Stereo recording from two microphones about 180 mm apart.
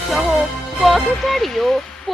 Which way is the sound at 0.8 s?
Centre (ahead or behind).